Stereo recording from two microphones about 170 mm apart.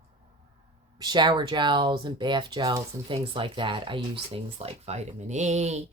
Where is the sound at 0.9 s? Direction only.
25° right (ahead or behind).